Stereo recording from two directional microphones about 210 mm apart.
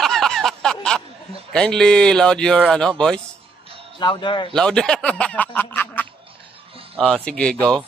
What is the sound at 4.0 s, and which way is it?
Speech, 20° left (ahead or behind).